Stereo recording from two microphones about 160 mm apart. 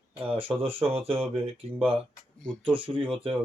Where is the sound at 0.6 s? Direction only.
35° right (ahead or behind).